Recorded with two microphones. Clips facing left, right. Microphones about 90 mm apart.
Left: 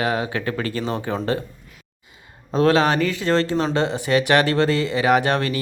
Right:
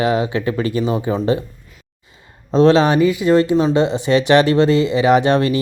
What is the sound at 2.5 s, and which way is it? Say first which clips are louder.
Speech: right 5 dB; 25° right (ahead or behind).